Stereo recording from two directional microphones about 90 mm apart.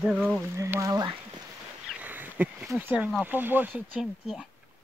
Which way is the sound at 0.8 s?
50° right (ahead or behind).